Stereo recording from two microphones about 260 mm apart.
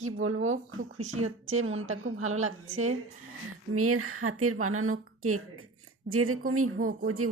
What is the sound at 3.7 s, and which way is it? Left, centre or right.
Speech, right.